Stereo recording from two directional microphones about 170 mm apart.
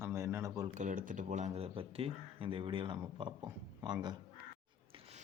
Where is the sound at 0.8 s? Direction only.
50° right (ahead or behind); by 4.1 s 25° right (ahead or behind).